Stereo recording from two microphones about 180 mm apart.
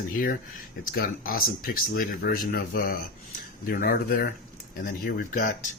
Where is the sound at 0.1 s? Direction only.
50° left (ahead or behind).